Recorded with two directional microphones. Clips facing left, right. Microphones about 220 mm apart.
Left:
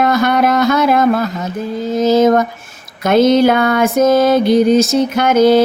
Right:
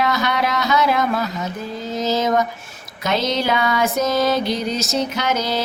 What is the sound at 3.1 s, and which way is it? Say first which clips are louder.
Music: left 11 dB; 50° left (ahead or behind).